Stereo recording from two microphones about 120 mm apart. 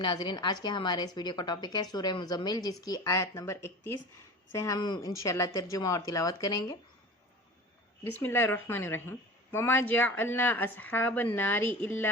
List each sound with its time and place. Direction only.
0.0 s a woman's voice: 35° left (ahead or behind)
8.2 s a woman's voice: 20° left (ahead or behind)